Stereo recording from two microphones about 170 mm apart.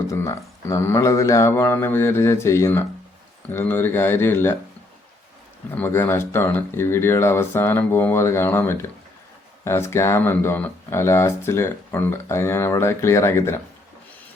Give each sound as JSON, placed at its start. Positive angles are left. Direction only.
{"t": 0.1, "sound": "speech", "side_deg": 20}
{"t": 5.7, "sound": "speech", "side_deg": 10}